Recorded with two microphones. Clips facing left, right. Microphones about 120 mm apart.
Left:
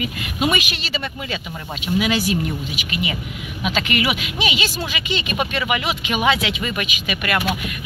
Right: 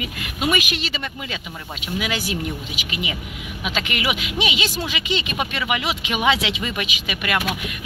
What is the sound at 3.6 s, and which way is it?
Speech, 10° right (ahead or behind).